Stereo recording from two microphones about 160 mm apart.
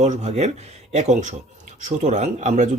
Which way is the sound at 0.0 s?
45° right (ahead or behind).